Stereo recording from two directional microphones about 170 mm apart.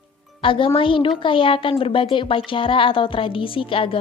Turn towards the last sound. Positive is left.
turn(degrees=30)  # may be behind; listen again after turning